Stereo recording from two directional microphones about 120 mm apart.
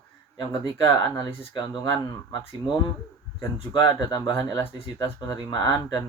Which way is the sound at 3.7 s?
30° left (ahead or behind).